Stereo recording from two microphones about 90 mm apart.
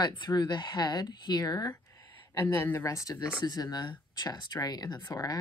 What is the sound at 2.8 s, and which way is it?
Speech, 40° left (ahead or behind).